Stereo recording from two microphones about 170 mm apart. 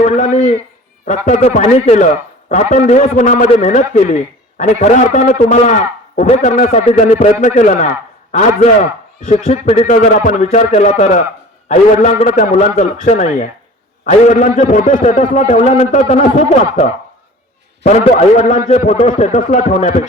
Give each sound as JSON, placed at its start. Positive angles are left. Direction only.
{"t": 0.0, "sound": "a man's voice", "side_deg": 45}
{"t": 18.0, "sound": "a man's voice", "side_deg": 40}